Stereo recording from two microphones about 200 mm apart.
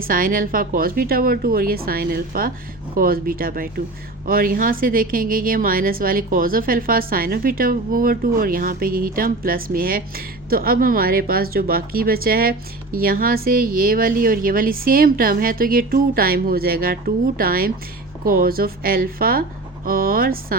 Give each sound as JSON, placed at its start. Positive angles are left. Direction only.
{"t": 0.1, "sound": "a woman's voice", "side_deg": -45}